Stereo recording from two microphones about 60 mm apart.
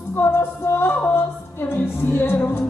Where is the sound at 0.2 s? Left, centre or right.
Left.